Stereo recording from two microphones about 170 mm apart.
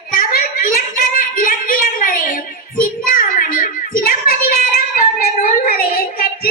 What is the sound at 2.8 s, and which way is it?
Child singing, 55° left (ahead or behind).